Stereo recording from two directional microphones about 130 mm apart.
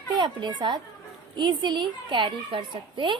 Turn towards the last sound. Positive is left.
turn(degrees=-40)  # may be behind; listen again after turning